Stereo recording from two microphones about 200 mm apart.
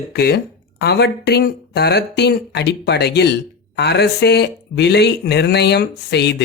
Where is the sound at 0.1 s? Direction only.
55° left (ahead or behind).